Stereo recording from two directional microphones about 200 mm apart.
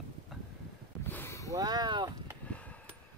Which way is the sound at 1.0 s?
10° left (ahead or behind).